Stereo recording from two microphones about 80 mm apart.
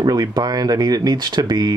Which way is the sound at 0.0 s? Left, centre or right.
Right.